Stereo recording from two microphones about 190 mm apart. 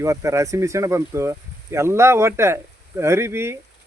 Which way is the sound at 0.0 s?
15° right (ahead or behind).